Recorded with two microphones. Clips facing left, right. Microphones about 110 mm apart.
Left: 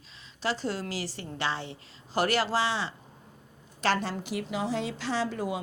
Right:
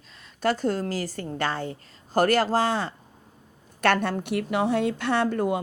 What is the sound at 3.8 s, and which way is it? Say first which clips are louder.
A woman's voice: right 5 dB; 55° right (ahead or behind).